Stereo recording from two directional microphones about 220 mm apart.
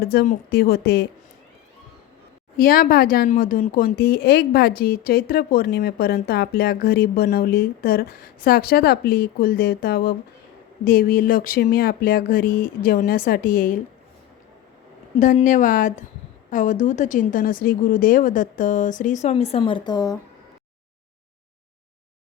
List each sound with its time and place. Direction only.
0.0 s speech: 45° left (ahead or behind)
2.6 s a woman's voice: 40° left (ahead or behind)
15.2 s a woman's voice: 35° left (ahead or behind); by 20.1 s 15° left (ahead or behind)